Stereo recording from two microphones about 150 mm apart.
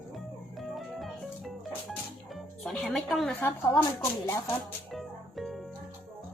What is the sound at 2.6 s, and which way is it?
Speech, 5° left (ahead or behind).